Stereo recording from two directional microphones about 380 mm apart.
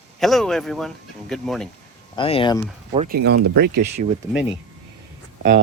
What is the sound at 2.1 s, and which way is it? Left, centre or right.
Speech, centre.